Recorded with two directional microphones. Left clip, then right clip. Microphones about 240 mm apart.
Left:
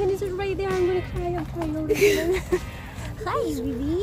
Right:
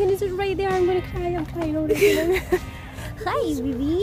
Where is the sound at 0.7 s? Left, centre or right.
Centre.